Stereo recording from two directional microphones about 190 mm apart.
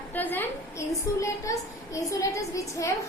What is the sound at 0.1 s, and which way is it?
A woman's voice, 10° left (ahead or behind).